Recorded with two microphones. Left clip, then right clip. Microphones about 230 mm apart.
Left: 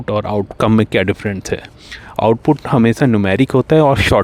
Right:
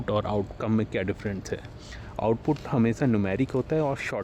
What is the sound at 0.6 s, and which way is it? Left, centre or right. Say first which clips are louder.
Speech: left 14 dB; left.